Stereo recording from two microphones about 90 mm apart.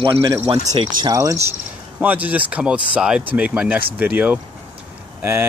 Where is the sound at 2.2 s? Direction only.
15° right (ahead or behind).